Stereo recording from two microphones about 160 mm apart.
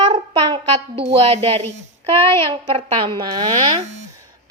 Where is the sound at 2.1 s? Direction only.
15° left (ahead or behind).